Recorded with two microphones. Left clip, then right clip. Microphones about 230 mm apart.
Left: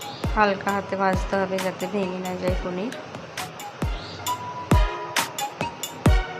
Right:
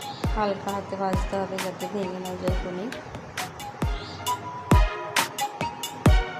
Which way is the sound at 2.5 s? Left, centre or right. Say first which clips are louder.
Left 3 dB; centre.